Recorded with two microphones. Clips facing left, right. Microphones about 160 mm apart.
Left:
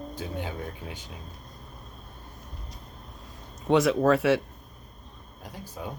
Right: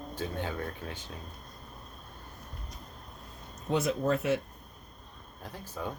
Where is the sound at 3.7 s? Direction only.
85° left.